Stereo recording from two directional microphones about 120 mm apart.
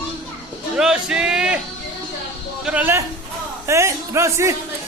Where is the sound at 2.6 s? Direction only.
10° right (ahead or behind).